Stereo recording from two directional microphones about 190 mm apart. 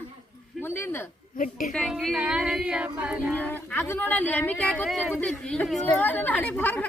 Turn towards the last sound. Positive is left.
turn(degrees=10)  # may be behind; listen again after turning